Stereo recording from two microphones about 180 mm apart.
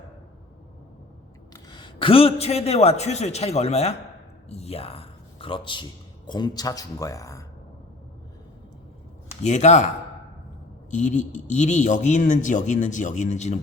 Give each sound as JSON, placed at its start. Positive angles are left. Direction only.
{"t": 1.5, "sound": "a man's voice", "side_deg": 25}
{"t": 4.4, "sound": "a sound", "side_deg": 35}
{"t": 6.2, "sound": "speech", "side_deg": 25}
{"t": 9.4, "sound": "speech", "side_deg": 40}
{"t": 10.9, "sound": "a man's voice", "side_deg": 45}